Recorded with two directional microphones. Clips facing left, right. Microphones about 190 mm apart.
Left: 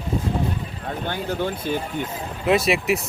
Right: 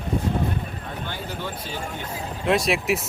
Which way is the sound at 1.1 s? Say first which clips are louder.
Left 9 dB; 55° left (ahead or behind).